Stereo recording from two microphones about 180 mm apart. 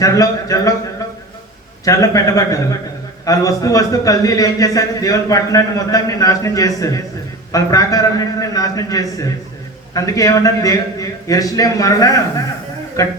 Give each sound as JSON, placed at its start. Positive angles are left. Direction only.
{"t": 0.0, "sound": "a man's voice", "side_deg": 20}
{"t": 1.8, "sound": "a man's voice", "side_deg": 20}